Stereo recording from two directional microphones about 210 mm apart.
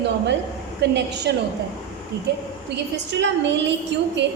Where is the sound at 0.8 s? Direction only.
55° right (ahead or behind).